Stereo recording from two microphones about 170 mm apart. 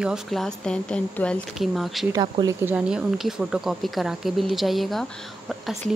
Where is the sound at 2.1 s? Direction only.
20° right (ahead or behind).